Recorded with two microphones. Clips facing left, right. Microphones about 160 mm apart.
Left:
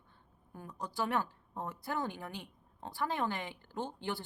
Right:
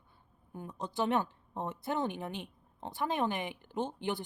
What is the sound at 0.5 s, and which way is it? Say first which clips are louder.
Speech: right 3 dB; 20° right (ahead or behind).